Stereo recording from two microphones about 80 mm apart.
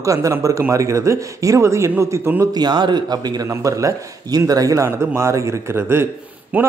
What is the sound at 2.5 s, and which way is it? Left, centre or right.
Speech, right.